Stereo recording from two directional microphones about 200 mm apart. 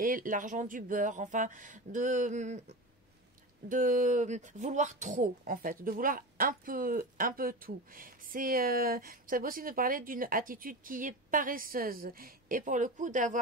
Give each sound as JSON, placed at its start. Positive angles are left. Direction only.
{"t": 0.0, "sound": "speech", "side_deg": -45}
{"t": 3.6, "sound": "speech", "side_deg": -40}